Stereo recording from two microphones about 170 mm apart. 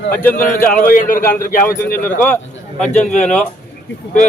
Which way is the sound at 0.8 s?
50° left (ahead or behind).